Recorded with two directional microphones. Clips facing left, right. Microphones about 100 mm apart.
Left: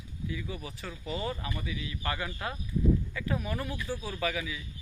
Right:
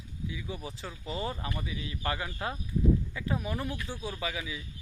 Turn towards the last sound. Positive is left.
turn(degrees=-25)  # may be behind; listen again after turning